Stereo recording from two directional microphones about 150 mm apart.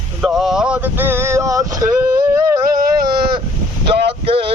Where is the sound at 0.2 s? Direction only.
Centre (ahead or behind); by 2.7 s 25° right (ahead or behind).